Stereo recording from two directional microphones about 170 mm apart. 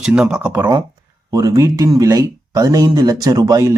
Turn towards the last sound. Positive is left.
turn(degrees=-20)  # may be behind; listen again after turning